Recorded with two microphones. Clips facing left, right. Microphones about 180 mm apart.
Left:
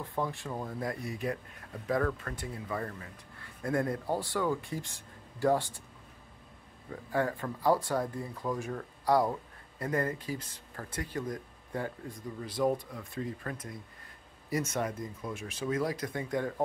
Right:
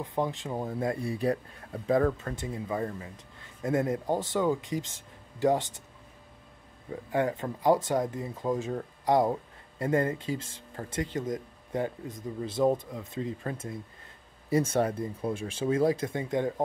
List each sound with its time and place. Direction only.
0.0 s speech: 20° right (ahead or behind)
7.1 s speech: 20° right (ahead or behind)